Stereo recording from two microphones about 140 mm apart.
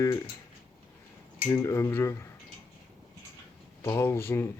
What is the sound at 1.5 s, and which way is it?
Speech, 20° left (ahead or behind).